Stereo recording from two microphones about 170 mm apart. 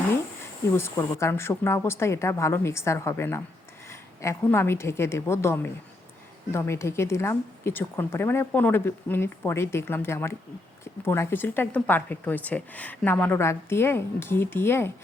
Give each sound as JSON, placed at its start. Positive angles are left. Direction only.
{"t": 0.8, "sound": "speech", "side_deg": 15}